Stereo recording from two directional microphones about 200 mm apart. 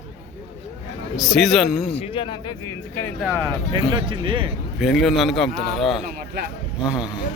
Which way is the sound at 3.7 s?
25° right (ahead or behind).